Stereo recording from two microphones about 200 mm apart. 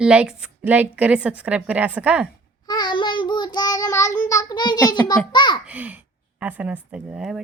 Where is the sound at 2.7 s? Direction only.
20° left (ahead or behind).